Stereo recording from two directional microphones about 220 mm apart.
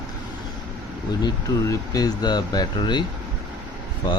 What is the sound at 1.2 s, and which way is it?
Speech, 15° left (ahead or behind).